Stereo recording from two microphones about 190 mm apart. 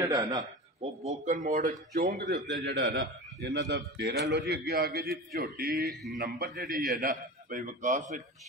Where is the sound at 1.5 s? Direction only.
50° right (ahead or behind).